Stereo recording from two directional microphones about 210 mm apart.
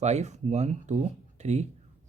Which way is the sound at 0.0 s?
35° right (ahead or behind).